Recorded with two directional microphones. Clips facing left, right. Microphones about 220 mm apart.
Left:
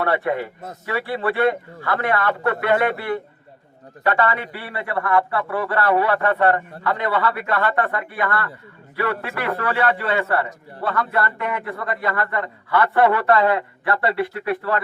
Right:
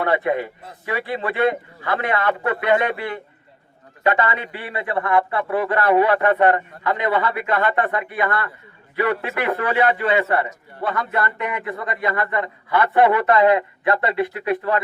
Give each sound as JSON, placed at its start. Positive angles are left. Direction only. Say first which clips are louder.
{"t": 0.0, "sound": "a man's voice", "louder": "right 1 dB", "side_deg": -15}